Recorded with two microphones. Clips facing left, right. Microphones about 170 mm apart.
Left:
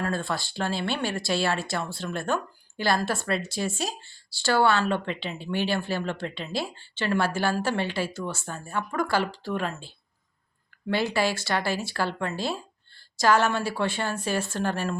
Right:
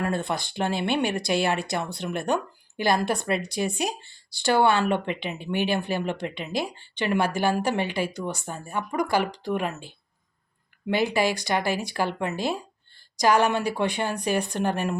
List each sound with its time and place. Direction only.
0.0 s a woman's voice: 20° right (ahead or behind)